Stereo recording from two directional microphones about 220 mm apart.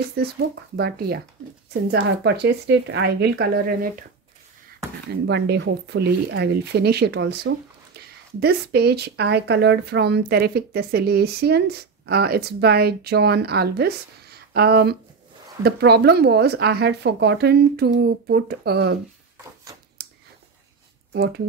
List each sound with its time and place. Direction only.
0.2 s speech: 45° right (ahead or behind)
5.2 s speech: 50° right (ahead or behind)
20.0 s a sound: 45° right (ahead or behind)
21.1 s speech: 45° right (ahead or behind)